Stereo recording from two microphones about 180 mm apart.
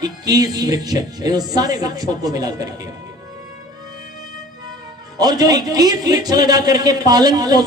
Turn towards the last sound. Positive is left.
turn(degrees=-20)  # may be behind; listen again after turning